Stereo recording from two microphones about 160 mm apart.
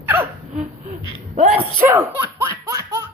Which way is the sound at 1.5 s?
15° right (ahead or behind).